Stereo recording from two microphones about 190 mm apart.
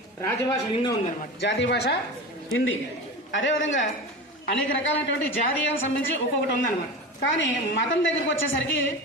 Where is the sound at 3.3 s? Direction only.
85° left.